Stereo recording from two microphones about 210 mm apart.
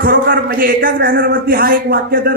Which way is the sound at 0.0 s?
45° right (ahead or behind).